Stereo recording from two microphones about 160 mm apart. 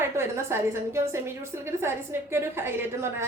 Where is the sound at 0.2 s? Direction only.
15° right (ahead or behind).